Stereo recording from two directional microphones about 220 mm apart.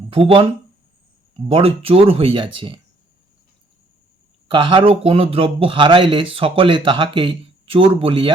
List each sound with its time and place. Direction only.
0.1 s speech: 25° right (ahead or behind)
1.5 s speech: 25° right (ahead or behind)
4.4 s speech: 20° right (ahead or behind)